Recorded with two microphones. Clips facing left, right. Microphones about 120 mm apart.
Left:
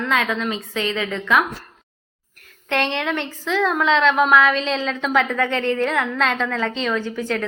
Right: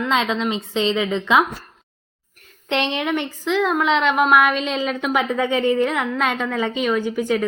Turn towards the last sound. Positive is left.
turn(degrees=-10)  # may be behind; listen again after turning